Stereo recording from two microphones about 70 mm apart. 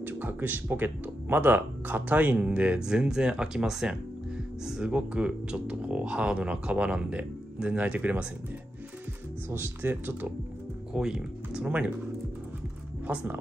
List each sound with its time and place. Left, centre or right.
0.0 s speech: right
9.5 s speech: right
10.9 s speech: centre
13.0 s speech: right